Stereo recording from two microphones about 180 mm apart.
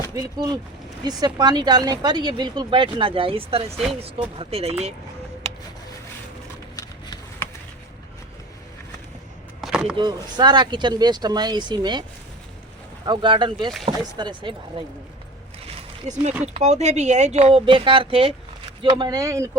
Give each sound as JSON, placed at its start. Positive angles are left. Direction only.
{"t": 0.1, "sound": "speech", "side_deg": -20}
{"t": 9.6, "sound": "a sound", "side_deg": 0}
{"t": 10.0, "sound": "speech", "side_deg": -25}
{"t": 13.1, "sound": "speech", "side_deg": -25}
{"t": 15.6, "sound": "a sound", "side_deg": -40}
{"t": 16.6, "sound": "speech", "side_deg": -35}